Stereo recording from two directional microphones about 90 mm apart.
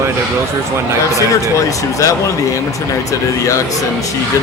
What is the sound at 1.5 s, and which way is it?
Speech, 35° left (ahead or behind).